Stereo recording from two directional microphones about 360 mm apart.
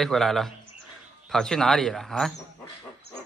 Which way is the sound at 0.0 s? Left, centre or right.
Centre.